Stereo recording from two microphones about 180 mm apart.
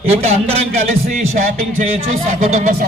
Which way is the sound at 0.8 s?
45° right (ahead or behind).